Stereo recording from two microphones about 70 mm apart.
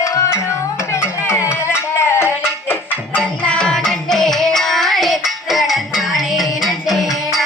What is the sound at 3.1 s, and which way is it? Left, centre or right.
Music, centre.